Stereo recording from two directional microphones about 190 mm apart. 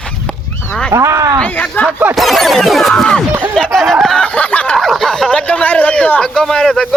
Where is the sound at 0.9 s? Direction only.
15° right (ahead or behind).